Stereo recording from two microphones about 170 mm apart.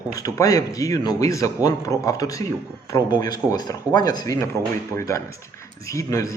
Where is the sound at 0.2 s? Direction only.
20° left (ahead or behind).